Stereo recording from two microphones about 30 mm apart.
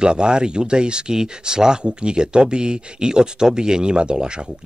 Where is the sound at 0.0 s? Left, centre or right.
Right.